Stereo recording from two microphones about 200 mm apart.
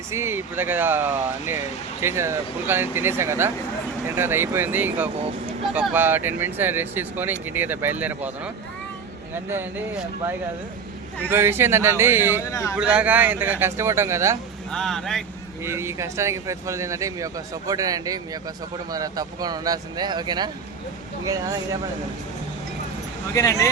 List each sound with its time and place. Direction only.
0.1 s speech: 10° right (ahead or behind)
11.3 s speech: 10° right (ahead or behind)
12.5 s speech: 15° left (ahead or behind)
12.7 s speech: 5° right (ahead or behind)
14.7 s speech: 5° left (ahead or behind)
15.6 s speech: 15° right (ahead or behind)
23.3 s speech: 15° left (ahead or behind)